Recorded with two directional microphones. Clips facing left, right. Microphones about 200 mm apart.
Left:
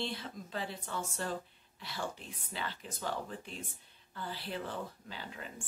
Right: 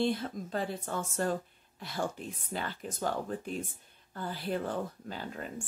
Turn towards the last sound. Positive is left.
turn(degrees=-45)  # may be behind; listen again after turning